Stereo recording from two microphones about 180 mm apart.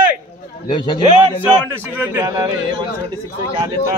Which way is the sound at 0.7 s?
25° left (ahead or behind).